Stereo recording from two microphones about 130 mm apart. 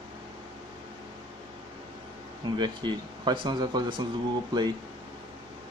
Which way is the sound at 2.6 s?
35° right (ahead or behind).